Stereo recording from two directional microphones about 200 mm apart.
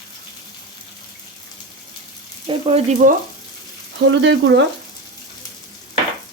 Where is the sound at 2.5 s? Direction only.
30° right (ahead or behind).